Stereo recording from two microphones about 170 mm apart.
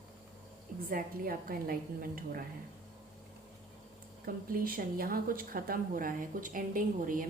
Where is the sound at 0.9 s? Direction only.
55° right (ahead or behind).